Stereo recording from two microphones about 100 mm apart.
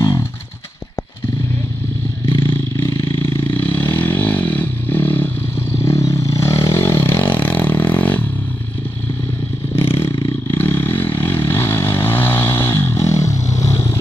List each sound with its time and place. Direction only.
0.0 s a sound: 30° left (ahead or behind)
3.7 s vehicle: 20° left (ahead or behind)
10.6 s vehicle: 25° left (ahead or behind)